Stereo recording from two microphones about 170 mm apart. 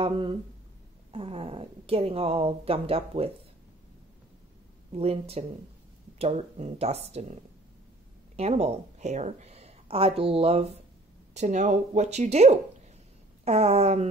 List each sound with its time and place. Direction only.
0.0 s a woman's voice: 30° right (ahead or behind)
4.9 s a woman's voice: 35° right (ahead or behind)
8.4 s a woman's voice: 40° right (ahead or behind)